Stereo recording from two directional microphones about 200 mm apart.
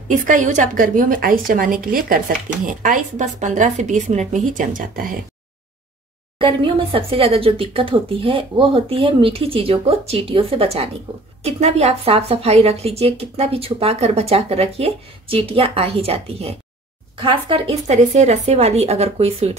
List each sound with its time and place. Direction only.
0.1 s a woman's voice: 40° right (ahead or behind)
6.3 s a woman's voice: 25° right (ahead or behind)